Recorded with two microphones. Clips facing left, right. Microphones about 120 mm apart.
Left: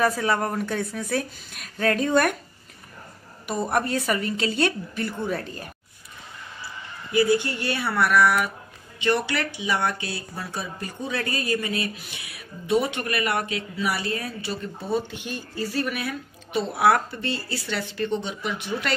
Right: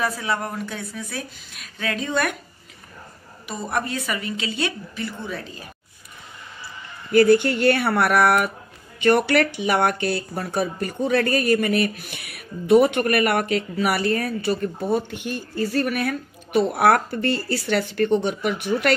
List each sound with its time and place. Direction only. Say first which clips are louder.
0.0 s a woman's voice: left 3 dB; 50° left (ahead or behind)
3.4 s a woman's voice: left 2 dB; 45° left (ahead or behind)
7.1 s speech: right 6 dB; 60° right (ahead or behind)